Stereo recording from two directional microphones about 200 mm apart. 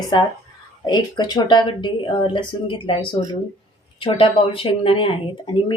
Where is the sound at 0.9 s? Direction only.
20° left (ahead or behind).